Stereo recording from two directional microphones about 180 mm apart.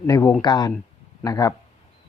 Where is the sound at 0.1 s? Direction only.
15° left (ahead or behind).